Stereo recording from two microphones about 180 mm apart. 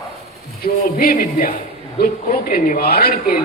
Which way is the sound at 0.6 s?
50° left (ahead or behind).